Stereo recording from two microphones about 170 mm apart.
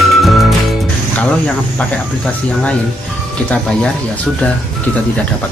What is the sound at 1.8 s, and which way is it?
Speech, 5° left (ahead or behind).